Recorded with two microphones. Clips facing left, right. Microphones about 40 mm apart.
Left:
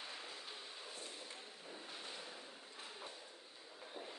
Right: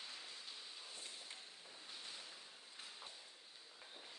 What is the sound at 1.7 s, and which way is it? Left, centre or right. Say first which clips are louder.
Ocean: left 4 dB; left.